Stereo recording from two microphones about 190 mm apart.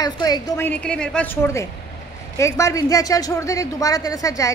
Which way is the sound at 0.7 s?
5° left (ahead or behind).